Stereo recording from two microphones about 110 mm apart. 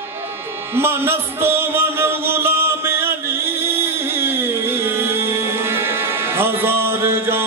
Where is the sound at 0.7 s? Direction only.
20° right (ahead or behind).